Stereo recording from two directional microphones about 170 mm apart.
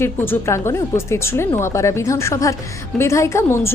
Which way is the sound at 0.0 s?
15° left (ahead or behind).